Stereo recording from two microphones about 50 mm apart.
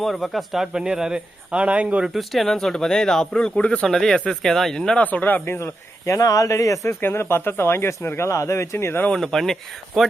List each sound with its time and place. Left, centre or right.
0.0 s speech: centre; by 2.0 s right
2.0 s speech: centre; by 3.8 s left
3.8 s speech: centre
4.9 s speech: left
5.2 s speech: left
5.5 s speech: left
7.0 s speech: left
9.1 s speech: centre